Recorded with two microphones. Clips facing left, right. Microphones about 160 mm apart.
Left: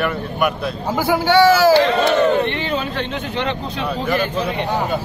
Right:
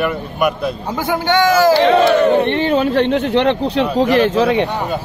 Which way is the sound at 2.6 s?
55° right (ahead or behind).